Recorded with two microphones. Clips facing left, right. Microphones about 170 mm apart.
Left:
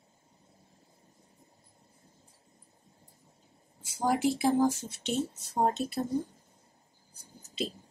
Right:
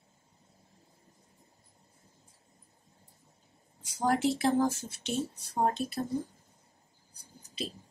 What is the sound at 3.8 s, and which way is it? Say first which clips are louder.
Speech: even; 5° left (ahead or behind).